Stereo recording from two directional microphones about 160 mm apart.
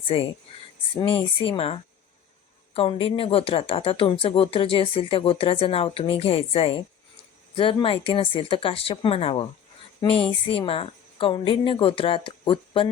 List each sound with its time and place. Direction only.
0.1 s speech: 35° left (ahead or behind)